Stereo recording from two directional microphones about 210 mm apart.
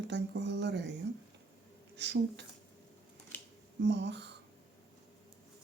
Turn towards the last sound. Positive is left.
turn(degrees=-55)  # may be behind; listen again after turning